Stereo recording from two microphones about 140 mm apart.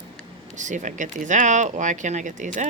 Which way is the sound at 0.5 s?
60° right (ahead or behind).